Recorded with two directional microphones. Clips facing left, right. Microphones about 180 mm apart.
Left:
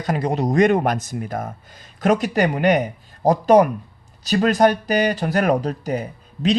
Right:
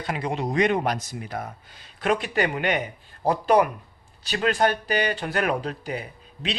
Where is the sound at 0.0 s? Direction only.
40° left (ahead or behind).